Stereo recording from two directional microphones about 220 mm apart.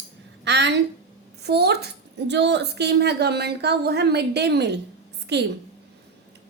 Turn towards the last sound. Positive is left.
turn(degrees=-50)  # may be behind; listen again after turning